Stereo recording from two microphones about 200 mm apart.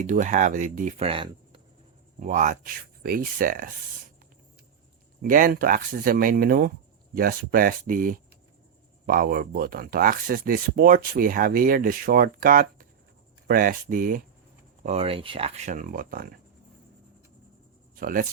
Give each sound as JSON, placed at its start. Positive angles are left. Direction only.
{"t": 0.0, "sound": "speech", "side_deg": -40}
{"t": 2.1, "sound": "speech", "side_deg": -40}
{"t": 5.2, "sound": "speech", "side_deg": -45}
{"t": 14.8, "sound": "speech", "side_deg": -30}
{"t": 17.9, "sound": "speech", "side_deg": -45}